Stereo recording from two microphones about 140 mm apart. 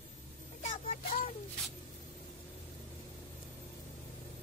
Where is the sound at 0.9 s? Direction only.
70° left (ahead or behind).